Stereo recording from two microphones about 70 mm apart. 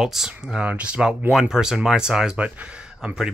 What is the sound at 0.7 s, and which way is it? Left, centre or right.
Speech, centre.